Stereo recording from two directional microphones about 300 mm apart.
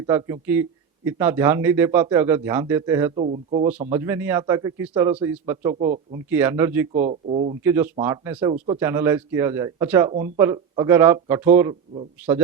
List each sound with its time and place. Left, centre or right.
0.0 s a man's voice: centre
3.2 s speech: right
3.6 s a man's voice: centre
6.3 s a man's voice: centre
7.0 s speech: right
7.6 s a man's voice: centre